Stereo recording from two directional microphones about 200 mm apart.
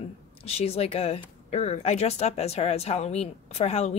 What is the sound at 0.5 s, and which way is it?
Speech, 30° left (ahead or behind).